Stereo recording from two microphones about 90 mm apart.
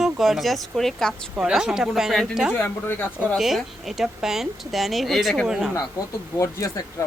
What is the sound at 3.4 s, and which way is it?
Speech, 5° right (ahead or behind).